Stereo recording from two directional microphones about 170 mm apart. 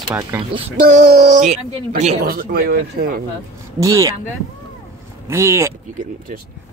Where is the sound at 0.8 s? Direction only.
60° right (ahead or behind).